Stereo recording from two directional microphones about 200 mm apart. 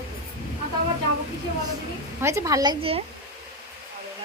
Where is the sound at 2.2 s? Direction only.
15° right (ahead or behind).